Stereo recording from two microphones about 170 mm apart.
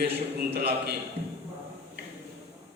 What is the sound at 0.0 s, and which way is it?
Speech, 65° right (ahead or behind).